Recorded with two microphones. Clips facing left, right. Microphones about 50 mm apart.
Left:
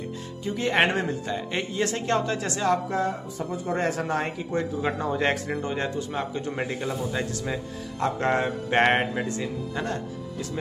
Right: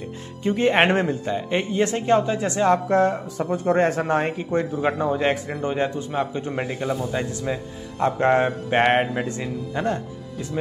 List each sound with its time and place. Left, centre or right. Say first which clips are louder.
0.4 s speech: right 7 dB; right
0.9 s a man's voice: right 5 dB; right
2.9 s speech: right 7 dB; right
3.7 s a man's voice: right 5 dB; right; by 5.2 s centre
5.2 s speech: right 2 dB; centre
5.6 s a man's voice: right 4 dB; right
8.0 s a man's voice: right 5 dB; right
8.6 s a man's voice: right 1 dB; centre
9.1 s a man's voice: right 2 dB; centre